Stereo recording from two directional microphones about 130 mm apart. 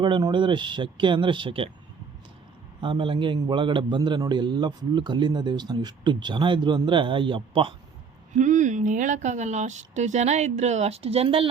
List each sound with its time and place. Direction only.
0.0 s a man's voice: 35° right (ahead or behind)
2.8 s a man's voice: 40° right (ahead or behind)
8.4 s speech: 70° right (ahead or behind); by 11.4 s 45° right (ahead or behind)